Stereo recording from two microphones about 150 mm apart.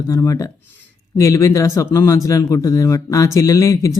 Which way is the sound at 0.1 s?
20° left (ahead or behind).